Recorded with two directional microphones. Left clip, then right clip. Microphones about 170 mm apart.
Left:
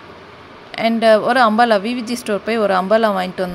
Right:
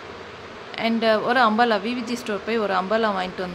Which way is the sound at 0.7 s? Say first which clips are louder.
Left 8 dB; 40° left (ahead or behind).